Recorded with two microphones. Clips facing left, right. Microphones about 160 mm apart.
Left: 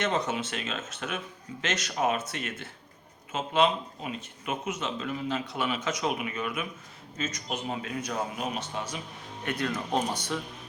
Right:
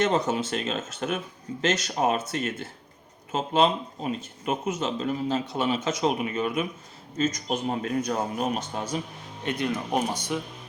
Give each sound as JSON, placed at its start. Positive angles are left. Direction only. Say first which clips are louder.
{"t": 0.0, "sound": "speech", "louder": "right 5 dB", "side_deg": -35}
{"t": 9.4, "sound": "speech", "louder": "right 3 dB", "side_deg": -20}